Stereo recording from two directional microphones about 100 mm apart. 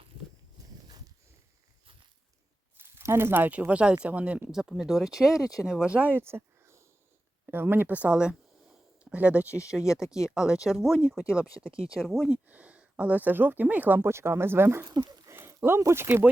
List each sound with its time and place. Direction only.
2.7 s speech: 25° right (ahead or behind); by 11.7 s 10° right (ahead or behind)
11.9 s speech: 5° left (ahead or behind)
12.3 s speech: 15° right (ahead or behind)